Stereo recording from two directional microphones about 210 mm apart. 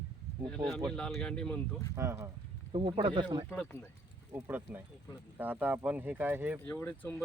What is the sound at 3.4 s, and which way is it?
Speech, 5° left (ahead or behind).